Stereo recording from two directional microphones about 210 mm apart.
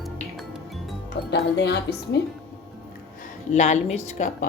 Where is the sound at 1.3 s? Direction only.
55° left (ahead or behind).